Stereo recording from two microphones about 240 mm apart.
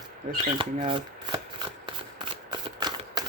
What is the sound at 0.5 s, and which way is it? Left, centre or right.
Speech, centre.